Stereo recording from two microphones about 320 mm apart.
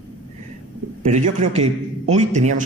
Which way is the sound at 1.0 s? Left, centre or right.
Right.